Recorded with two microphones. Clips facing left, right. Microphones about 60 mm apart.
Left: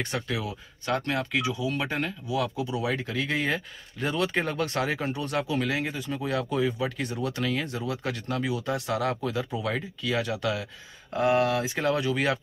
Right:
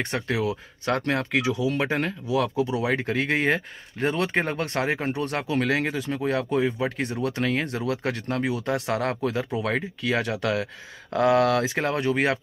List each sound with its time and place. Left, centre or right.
0.0 s speech: right
1.4 s speech: right
1.8 s speech: right
2.5 s speech: right
2.8 s speech: right
5.1 s speech: right
11.1 s speech: right
11.7 s speech: right